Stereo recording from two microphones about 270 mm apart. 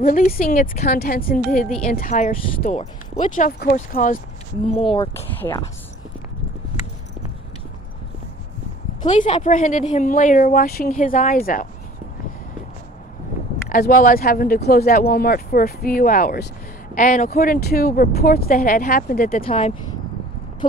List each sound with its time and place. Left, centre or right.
0.0 s a woman's voice: left; by 5.7 s centre
9.0 s speech: left
13.7 s speech: left
19.4 s speech: left